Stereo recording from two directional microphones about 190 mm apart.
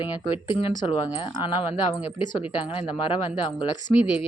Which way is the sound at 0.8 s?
30° left (ahead or behind).